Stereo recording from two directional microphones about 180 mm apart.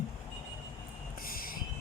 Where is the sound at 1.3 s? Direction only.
55° left (ahead or behind).